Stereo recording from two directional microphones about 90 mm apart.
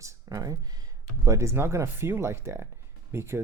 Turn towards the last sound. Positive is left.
turn(degrees=-30)  # may be behind; listen again after turning